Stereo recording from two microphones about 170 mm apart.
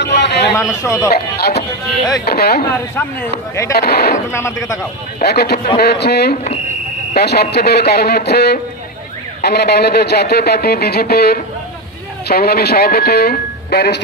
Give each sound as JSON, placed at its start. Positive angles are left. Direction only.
{"t": 0.0, "sound": "a sound", "side_deg": 90}
{"t": 0.6, "sound": "a man's voice", "side_deg": 15}
{"t": 1.1, "sound": "a man's voice", "side_deg": 70}
{"t": 3.0, "sound": "a man's voice", "side_deg": 15}
{"t": 3.7, "sound": "a man's voice", "side_deg": 70}
{"t": 4.3, "sound": "a man's voice", "side_deg": 15}
{"t": 5.2, "sound": "a man's voice", "side_deg": 70}